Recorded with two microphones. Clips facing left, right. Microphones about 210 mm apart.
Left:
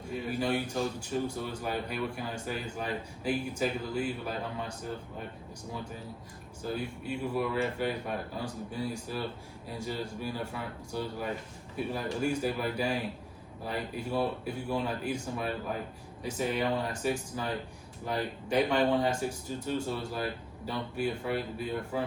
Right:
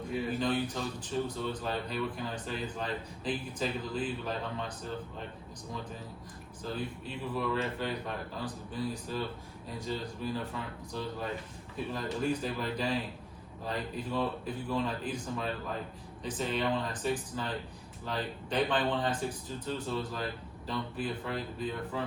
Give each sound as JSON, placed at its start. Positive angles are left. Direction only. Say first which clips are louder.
{"t": 0.3, "sound": "a man's voice", "louder": "left 4 dB", "side_deg": 10}
{"t": 6.6, "sound": "a man's voice", "louder": "left 2 dB", "side_deg": 10}